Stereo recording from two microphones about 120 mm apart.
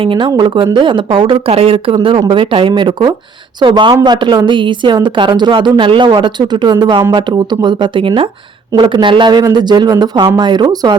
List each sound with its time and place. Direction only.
0.0 s speech: 45° right (ahead or behind)